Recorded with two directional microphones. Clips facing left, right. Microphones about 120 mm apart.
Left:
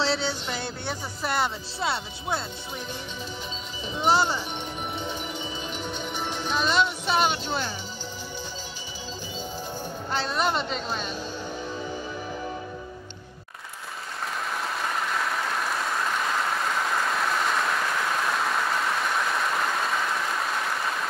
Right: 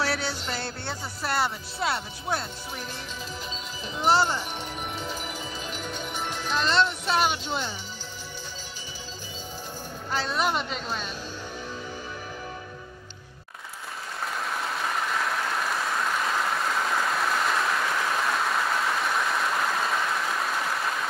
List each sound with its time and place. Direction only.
0.0 s music: 25° left (ahead or behind)
0.5 s speech: 15° left (ahead or behind)
4.1 s speech: 15° left (ahead or behind)
4.9 s music: 5° right (ahead or behind)
6.3 s speech: centre (ahead or behind)
10.1 s speech: centre (ahead or behind)
14.5 s applause: centre (ahead or behind)